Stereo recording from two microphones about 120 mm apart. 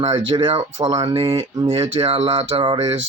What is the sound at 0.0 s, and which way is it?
Speech, 45° right (ahead or behind).